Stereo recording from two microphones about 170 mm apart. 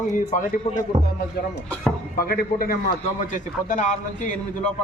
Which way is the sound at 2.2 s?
60° left (ahead or behind).